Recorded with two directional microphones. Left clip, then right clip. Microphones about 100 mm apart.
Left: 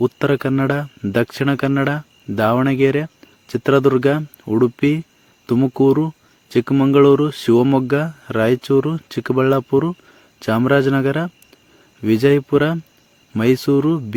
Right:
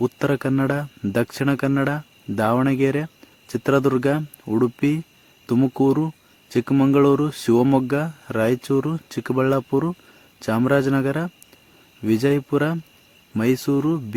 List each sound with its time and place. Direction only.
0.0 s speech: 20° left (ahead or behind)